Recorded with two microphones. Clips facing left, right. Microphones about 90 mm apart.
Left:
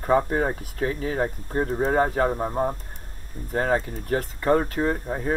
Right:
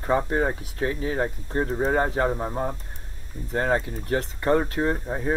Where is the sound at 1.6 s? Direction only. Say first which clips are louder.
Left 2 dB; centre (ahead or behind).